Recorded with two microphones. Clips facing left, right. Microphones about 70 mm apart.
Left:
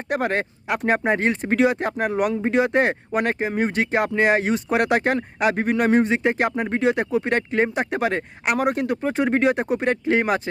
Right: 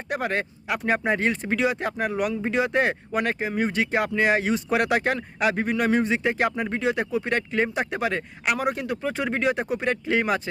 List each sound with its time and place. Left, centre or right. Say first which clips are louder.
0.1 s speech: left 4 dB; left
2.0 s speech: left 5 dB; left